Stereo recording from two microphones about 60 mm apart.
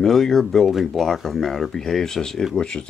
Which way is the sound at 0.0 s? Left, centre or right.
Centre.